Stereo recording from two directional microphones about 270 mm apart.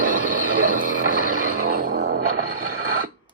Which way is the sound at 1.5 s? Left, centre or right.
Right.